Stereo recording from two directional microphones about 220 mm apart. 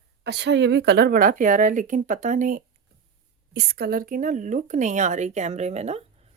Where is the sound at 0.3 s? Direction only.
50° right (ahead or behind).